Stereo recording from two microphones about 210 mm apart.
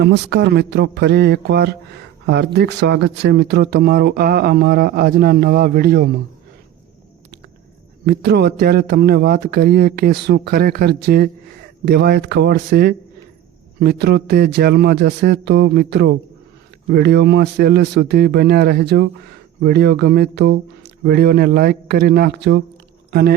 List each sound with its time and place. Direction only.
0.0 s speech: 55° right (ahead or behind)
8.0 s speech: 50° right (ahead or behind)